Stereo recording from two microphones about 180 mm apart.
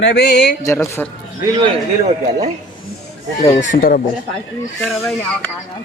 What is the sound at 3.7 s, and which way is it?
Speech, 50° left (ahead or behind).